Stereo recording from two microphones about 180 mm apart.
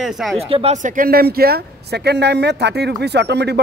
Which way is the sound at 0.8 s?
50° right (ahead or behind).